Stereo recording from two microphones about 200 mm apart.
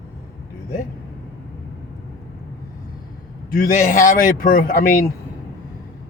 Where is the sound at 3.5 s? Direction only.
40° left (ahead or behind).